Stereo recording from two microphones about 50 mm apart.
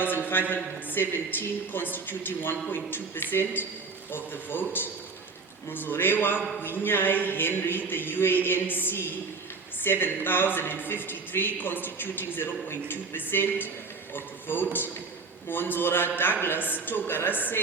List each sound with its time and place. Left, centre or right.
0.0 s a man's voice: left
5.7 s a man's voice: left